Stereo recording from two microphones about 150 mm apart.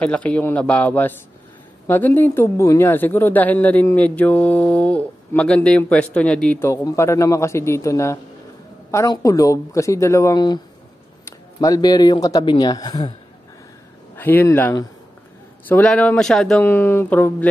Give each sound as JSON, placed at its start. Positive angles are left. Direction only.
{"t": 0.0, "sound": "speech", "side_deg": 10}
{"t": 6.6, "sound": "speech", "side_deg": 20}
{"t": 14.1, "sound": "speech", "side_deg": 15}
{"t": 15.7, "sound": "speech", "side_deg": 10}